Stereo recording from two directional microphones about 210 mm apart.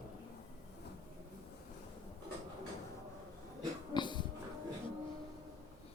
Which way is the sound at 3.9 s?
20° left (ahead or behind).